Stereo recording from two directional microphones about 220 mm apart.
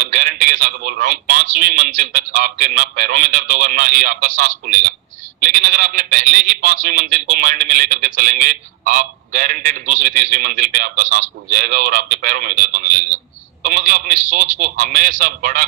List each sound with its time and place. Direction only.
0.0 s a man's voice: 40° right (ahead or behind)